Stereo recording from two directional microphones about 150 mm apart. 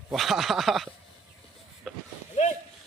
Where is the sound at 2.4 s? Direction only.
50° left (ahead or behind).